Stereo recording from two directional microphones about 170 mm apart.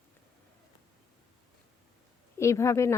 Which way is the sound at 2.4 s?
15° left (ahead or behind).